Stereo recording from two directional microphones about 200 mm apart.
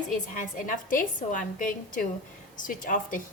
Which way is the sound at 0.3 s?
40° left (ahead or behind).